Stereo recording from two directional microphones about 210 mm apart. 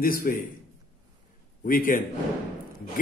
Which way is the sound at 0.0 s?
45° left (ahead or behind).